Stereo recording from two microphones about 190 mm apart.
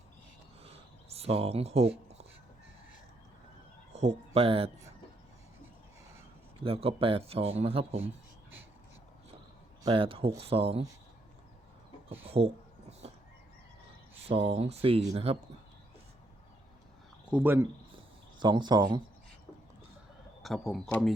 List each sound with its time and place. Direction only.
0.6 s a sound: 30° right (ahead or behind)
3.9 s a sound: 35° right (ahead or behind)
4.4 s speech: 30° right (ahead or behind)
6.7 s speech: 30° right (ahead or behind)
9.8 s speech: 30° right (ahead or behind)
12.2 s speech: 30° right (ahead or behind)
13.0 s a sound: 30° right (ahead or behind)
14.3 s speech: 30° right (ahead or behind)
17.3 s speech: 10° right (ahead or behind)
18.3 s speech: 25° right (ahead or behind)
20.4 s a man's voice: centre (ahead or behind)